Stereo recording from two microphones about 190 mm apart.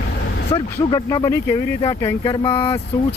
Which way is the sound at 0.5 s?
20° left (ahead or behind).